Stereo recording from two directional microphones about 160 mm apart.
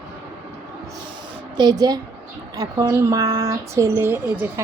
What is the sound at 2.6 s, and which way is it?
Speech, 20° right (ahead or behind).